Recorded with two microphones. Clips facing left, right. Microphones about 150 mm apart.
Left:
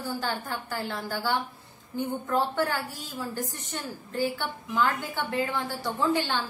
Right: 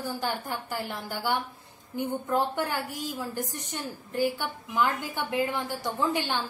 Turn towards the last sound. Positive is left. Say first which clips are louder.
# left 2 dB
turn(degrees=-15)  # may be behind; listen again after turning